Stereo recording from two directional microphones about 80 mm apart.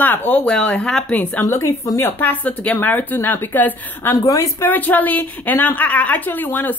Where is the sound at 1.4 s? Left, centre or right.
Left.